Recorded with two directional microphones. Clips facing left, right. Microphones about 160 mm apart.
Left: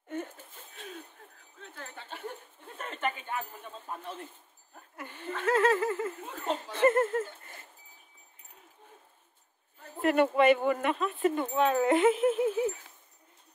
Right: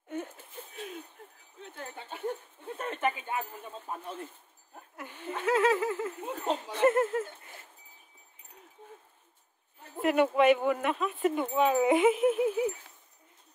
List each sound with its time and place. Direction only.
1.8 s a sound: 20° right (ahead or behind)
4.9 s speech: 5° right (ahead or behind)
10.0 s speech: 5° right (ahead or behind)